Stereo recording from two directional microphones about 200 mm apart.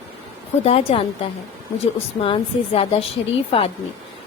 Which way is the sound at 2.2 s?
25° left (ahead or behind).